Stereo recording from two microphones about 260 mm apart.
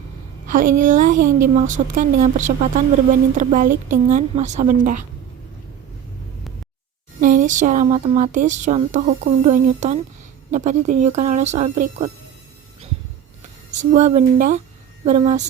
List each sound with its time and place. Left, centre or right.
0.4 s a sound: right
0.8 s speech: right
7.2 s speech: right
13.7 s speech: right